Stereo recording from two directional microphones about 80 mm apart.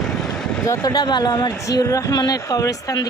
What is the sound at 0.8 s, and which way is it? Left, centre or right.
Speech, left.